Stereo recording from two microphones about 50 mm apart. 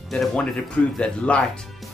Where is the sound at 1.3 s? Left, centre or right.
Left.